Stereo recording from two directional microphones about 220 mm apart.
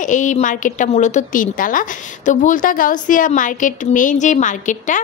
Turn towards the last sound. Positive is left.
turn(degrees=35)  # may be behind; listen again after turning